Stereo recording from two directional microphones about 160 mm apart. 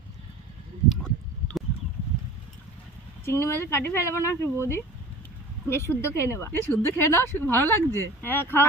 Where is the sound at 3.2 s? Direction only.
15° left (ahead or behind).